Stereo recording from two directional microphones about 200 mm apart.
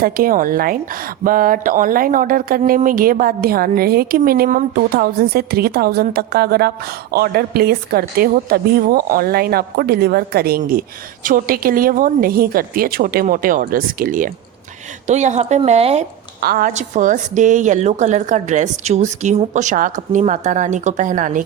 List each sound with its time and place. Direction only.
0.0 s a woman's voice: 45° right (ahead or behind)
16.4 s a woman's voice: 50° right (ahead or behind)